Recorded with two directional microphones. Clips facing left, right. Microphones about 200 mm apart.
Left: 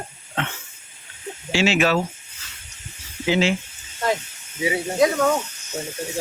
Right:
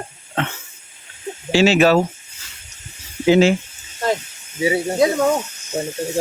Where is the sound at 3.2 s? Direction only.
45° right (ahead or behind).